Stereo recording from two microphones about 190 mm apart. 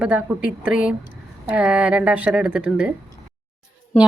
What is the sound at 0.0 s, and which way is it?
A woman's voice, 5° right (ahead or behind).